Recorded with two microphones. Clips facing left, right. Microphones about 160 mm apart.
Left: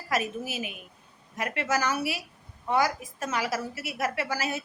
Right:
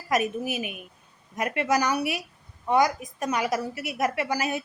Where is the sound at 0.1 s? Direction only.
20° right (ahead or behind).